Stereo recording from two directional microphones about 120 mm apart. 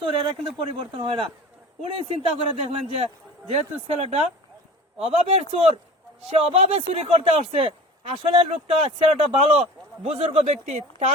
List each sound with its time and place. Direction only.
0.1 s speech: 50° right (ahead or behind)
8.4 s speech: 60° right (ahead or behind)
10.4 s speech: 75° right (ahead or behind)